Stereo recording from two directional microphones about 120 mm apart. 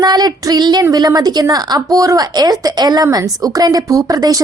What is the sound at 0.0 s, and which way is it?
A woman's voice, 35° right (ahead or behind).